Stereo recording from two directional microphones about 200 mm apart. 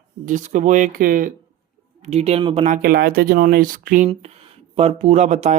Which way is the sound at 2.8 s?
45° right (ahead or behind).